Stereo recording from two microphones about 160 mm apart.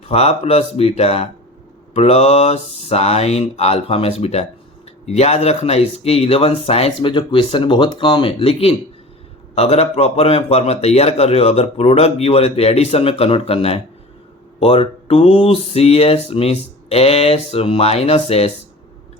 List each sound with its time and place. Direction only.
0.1 s speech: 40° left (ahead or behind)